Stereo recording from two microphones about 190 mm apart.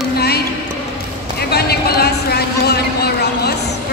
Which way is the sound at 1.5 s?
55° left (ahead or behind).